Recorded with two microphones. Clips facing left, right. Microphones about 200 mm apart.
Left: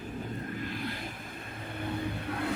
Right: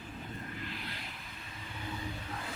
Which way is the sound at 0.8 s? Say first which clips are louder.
Left 8 dB; 50° left (ahead or behind).